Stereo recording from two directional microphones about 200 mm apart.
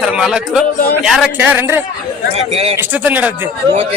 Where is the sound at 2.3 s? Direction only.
30° right (ahead or behind).